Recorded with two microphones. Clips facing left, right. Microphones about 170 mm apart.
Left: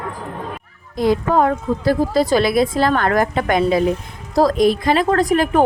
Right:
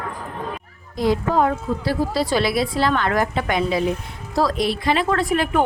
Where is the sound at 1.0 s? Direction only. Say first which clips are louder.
Left 3 dB; 50° left (ahead or behind).